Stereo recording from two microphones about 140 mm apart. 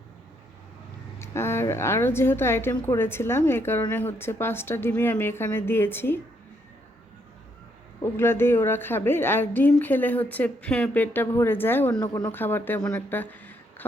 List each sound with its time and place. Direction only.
1.2 s a woman's voice: 20° left (ahead or behind)
8.1 s a woman's voice: 15° left (ahead or behind)